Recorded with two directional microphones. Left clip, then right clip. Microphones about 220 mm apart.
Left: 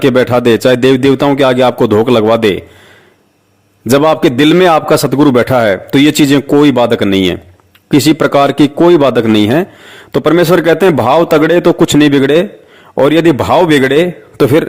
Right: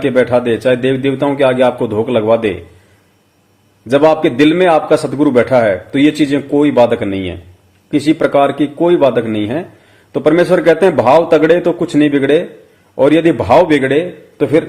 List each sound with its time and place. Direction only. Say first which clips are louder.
0.0 s a man's voice: left 3 dB; 50° left (ahead or behind)
3.8 s a man's voice: left 2 dB; 50° left (ahead or behind)